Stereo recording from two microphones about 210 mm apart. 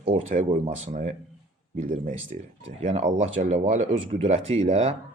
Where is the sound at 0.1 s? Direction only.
35° right (ahead or behind).